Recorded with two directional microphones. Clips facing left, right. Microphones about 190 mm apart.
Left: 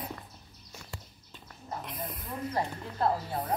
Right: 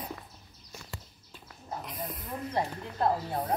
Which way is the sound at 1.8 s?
Centre (ahead or behind).